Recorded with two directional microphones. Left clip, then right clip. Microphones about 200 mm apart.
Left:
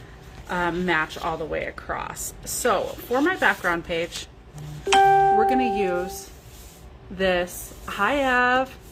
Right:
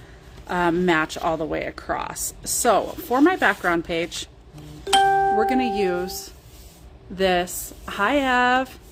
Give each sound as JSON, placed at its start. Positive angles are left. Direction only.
{"t": 0.4, "sound": "speech", "side_deg": -55}
{"t": 4.9, "sound": "music", "side_deg": 0}
{"t": 5.4, "sound": "speech", "side_deg": -50}
{"t": 7.2, "sound": "speech", "side_deg": -45}